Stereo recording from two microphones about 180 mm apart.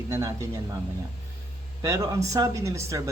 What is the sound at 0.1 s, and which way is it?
Speech, 20° right (ahead or behind).